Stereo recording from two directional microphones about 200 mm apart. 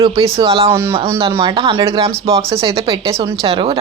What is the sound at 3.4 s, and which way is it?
Speech, 30° right (ahead or behind).